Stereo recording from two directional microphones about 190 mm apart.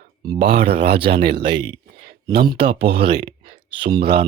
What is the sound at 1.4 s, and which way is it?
Speech, 25° right (ahead or behind).